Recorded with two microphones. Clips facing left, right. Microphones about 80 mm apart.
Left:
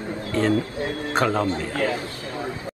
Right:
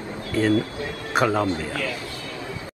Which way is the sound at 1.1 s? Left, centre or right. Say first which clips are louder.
Right 1 dB; centre.